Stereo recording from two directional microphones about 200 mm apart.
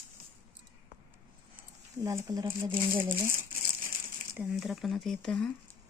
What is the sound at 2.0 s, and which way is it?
Speech, 15° right (ahead or behind).